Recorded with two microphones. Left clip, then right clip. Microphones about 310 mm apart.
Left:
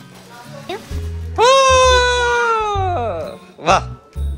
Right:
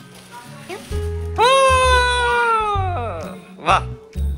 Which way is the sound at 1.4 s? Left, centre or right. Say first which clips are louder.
Left 3 dB; centre.